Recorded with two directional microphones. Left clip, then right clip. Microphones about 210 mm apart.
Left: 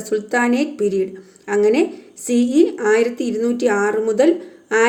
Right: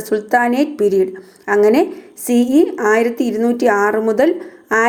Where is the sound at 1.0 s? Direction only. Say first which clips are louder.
Right 5 dB; 15° right (ahead or behind).